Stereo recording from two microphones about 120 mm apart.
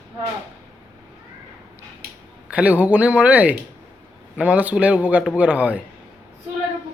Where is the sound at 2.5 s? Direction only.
10° right (ahead or behind).